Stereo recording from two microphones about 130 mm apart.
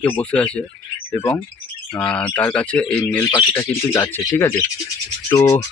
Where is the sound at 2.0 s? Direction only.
10° left (ahead or behind).